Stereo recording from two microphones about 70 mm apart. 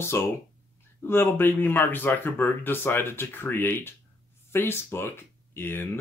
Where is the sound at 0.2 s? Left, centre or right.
Left.